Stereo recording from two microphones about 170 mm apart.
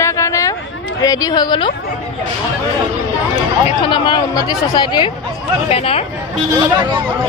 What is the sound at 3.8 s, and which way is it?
Speech, 30° left (ahead or behind).